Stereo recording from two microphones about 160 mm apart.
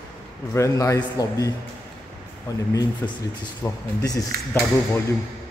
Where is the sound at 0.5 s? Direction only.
20° left (ahead or behind).